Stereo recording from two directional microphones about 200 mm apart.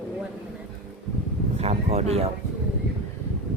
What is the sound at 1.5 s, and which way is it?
Speech, 30° right (ahead or behind).